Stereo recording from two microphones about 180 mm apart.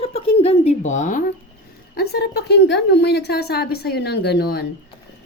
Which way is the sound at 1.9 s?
60° left (ahead or behind).